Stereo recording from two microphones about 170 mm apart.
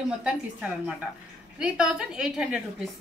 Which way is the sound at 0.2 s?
5° right (ahead or behind).